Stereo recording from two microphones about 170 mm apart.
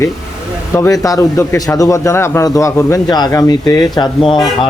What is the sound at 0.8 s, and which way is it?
A man's voice, 20° left (ahead or behind).